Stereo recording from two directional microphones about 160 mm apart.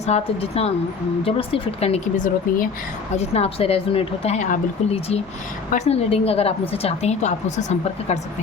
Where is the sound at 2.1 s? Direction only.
55° left (ahead or behind).